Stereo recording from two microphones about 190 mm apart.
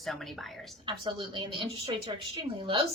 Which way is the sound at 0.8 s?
25° right (ahead or behind).